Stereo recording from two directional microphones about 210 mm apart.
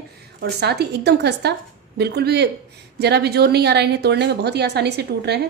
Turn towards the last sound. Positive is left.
turn(degrees=-50)  # may be behind; listen again after turning